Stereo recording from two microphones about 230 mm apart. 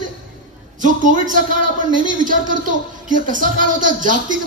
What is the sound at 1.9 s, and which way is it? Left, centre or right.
Speech, right.